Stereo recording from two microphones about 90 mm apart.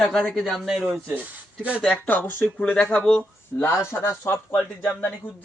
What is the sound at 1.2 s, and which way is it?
Speech, 15° right (ahead or behind).